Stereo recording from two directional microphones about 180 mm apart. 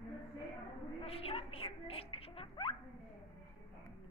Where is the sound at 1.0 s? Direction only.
35° left (ahead or behind).